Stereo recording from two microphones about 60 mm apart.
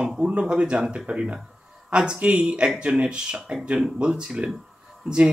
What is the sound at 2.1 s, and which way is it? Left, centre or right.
Speech, right.